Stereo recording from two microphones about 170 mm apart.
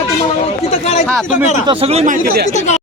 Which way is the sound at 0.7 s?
40° left (ahead or behind).